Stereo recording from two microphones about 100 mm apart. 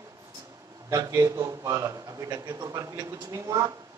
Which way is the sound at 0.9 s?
35° right (ahead or behind).